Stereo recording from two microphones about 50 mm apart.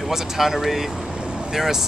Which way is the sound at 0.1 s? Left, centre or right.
Centre.